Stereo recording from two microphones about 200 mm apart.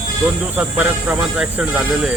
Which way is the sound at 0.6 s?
5° right (ahead or behind).